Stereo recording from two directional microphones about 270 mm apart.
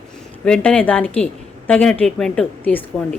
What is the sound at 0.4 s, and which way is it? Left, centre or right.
A woman's voice, centre.